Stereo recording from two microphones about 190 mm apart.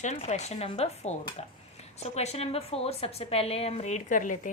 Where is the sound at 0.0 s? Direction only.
40° left (ahead or behind).